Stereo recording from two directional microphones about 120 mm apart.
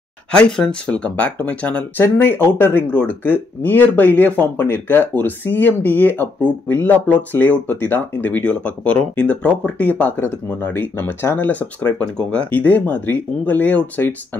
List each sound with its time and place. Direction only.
0.3 s speech: 5° left (ahead or behind)